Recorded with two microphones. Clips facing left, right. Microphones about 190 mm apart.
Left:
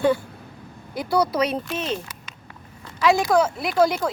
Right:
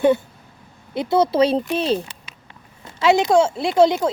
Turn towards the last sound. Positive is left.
turn(degrees=-20)  # may be behind; listen again after turning